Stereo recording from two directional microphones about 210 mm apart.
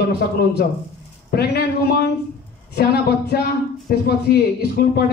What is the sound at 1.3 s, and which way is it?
A man's voice, 50° left (ahead or behind).